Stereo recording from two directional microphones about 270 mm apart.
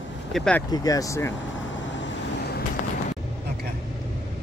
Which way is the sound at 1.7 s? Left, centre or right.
Left.